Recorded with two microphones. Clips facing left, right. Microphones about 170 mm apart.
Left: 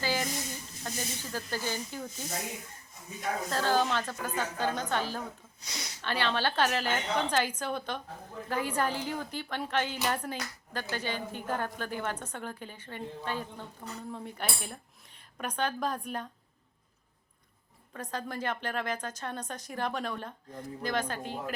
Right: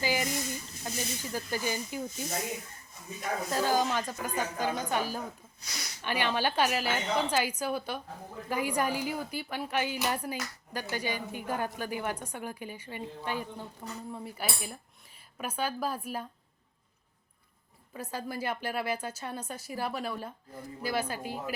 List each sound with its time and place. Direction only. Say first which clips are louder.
0.0 s a sound: right 1 dB; 15° right (ahead or behind)
0.9 s a woman's voice: right 1 dB; 15° right (ahead or behind)
3.5 s a woman's voice: even; 10° right (ahead or behind)
5.5 s speech: left 1 dB; 25° left (ahead or behind)
6.0 s a woman's voice: right 1 dB; 15° right (ahead or behind)
17.9 s a woman's voice: even; 10° right (ahead or behind)